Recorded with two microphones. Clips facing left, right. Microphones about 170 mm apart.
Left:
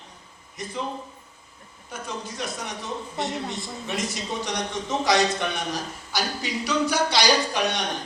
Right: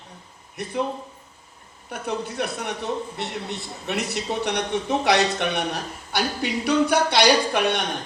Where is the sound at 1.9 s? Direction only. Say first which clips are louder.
Right 6 dB; 60° right (ahead or behind).